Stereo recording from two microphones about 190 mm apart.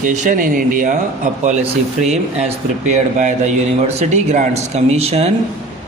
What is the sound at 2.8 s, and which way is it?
Speech, 40° right (ahead or behind).